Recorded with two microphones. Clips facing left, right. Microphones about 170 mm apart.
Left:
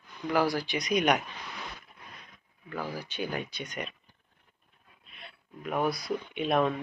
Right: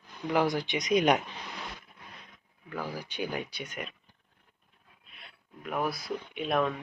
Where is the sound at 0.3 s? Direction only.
20° right (ahead or behind).